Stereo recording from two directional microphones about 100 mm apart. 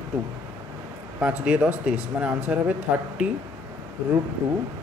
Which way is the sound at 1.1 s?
10° right (ahead or behind).